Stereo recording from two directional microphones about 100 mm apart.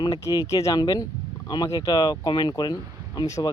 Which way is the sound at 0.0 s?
35° left (ahead or behind).